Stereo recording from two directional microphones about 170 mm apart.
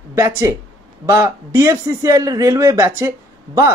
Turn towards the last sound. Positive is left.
turn(degrees=-20)  # may be behind; listen again after turning